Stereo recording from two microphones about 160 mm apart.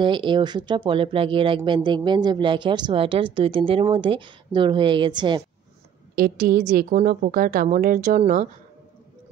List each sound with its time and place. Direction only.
0.0 s speech: 30° right (ahead or behind)
6.1 s speech: 70° right (ahead or behind); by 8.5 s 50° right (ahead or behind)